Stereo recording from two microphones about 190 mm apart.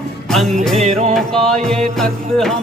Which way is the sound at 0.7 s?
35° right (ahead or behind).